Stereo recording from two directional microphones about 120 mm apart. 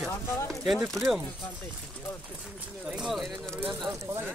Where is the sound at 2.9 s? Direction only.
5° right (ahead or behind).